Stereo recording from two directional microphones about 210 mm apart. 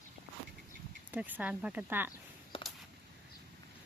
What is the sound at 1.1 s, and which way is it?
Speech, 10° right (ahead or behind).